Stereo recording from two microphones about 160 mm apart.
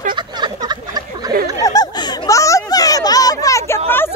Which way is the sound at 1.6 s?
25° left (ahead or behind).